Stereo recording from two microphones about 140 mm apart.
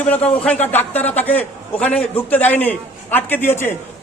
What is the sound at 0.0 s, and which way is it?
A man's voice, 10° left (ahead or behind).